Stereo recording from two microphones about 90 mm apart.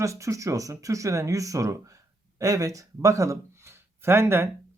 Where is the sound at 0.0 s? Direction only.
35° right (ahead or behind).